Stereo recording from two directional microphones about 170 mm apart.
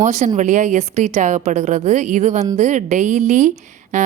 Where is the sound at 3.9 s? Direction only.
45° right (ahead or behind).